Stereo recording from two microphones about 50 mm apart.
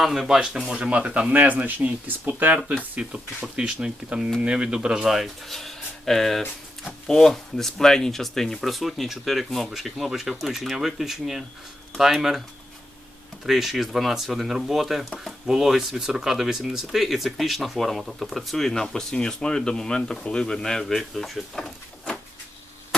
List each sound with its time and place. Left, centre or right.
0.0 s speech: centre
0.8 s speech: right
2.6 s speech: right; by 5.3 s centre
5.5 s speech: centre
13.4 s speech: centre